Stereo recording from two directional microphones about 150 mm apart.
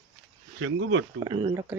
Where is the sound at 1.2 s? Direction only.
35° right (ahead or behind).